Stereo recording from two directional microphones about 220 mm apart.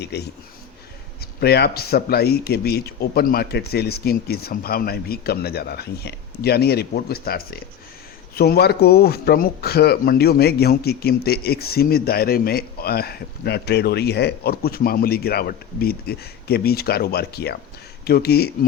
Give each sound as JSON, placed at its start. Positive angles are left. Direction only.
{"t": 0.0, "sound": "speech", "side_deg": 50}